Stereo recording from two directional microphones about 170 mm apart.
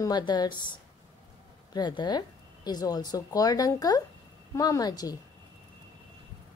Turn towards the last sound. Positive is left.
turn(degrees=20)  # may be behind; listen again after turning